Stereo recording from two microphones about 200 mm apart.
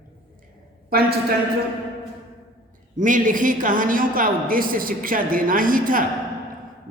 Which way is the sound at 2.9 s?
40° right (ahead or behind).